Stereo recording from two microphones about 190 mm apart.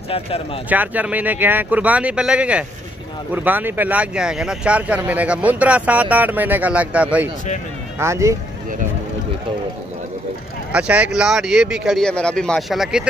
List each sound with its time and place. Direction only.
0.1 s speech: 30° left (ahead or behind)
0.7 s speech: 10° right (ahead or behind)
10.7 s speech: 5° right (ahead or behind)